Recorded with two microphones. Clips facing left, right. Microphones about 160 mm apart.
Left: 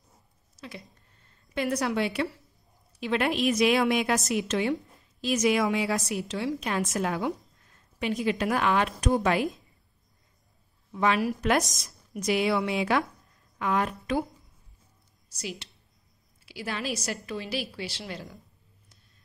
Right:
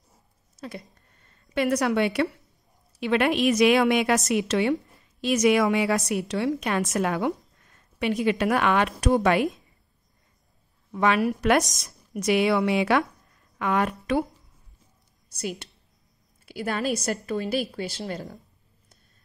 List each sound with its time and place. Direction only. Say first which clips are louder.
0.6 s a woman's voice: right 5 dB; 50° right (ahead or behind)
8.2 s a woman's voice: right 4 dB; 65° right (ahead or behind)
10.9 s a woman's voice: right 3 dB; 60° right (ahead or behind)
16.4 s a woman's voice: right 6 dB; 50° right (ahead or behind)